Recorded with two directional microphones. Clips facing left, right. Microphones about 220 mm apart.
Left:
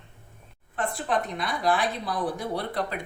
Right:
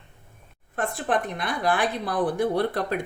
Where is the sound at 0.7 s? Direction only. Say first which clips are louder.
Right 2 dB; 50° right (ahead or behind).